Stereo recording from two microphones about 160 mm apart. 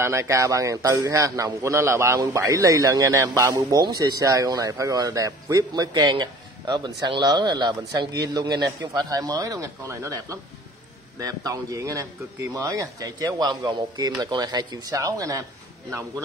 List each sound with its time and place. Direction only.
0.0 s a man's voice: 15° right (ahead or behind)